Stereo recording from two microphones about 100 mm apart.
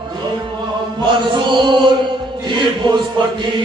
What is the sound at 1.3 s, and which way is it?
Chant, 50° right (ahead or behind).